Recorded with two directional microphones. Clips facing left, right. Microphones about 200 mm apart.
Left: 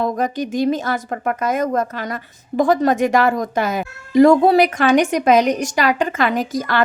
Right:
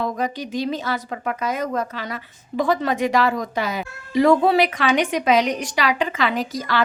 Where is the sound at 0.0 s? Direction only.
45° left (ahead or behind).